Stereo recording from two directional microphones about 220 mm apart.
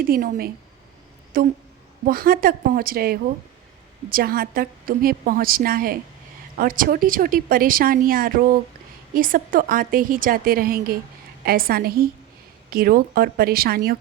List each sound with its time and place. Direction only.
0.0 s a woman's voice: 40° right (ahead or behind)